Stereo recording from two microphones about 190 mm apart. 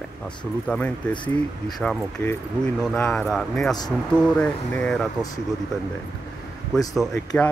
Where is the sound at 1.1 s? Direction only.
25° left (ahead or behind).